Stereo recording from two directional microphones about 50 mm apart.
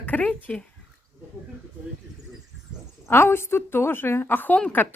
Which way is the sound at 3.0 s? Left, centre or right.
Left.